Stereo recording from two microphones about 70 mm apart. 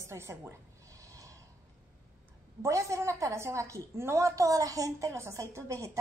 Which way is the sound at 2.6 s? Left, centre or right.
Right.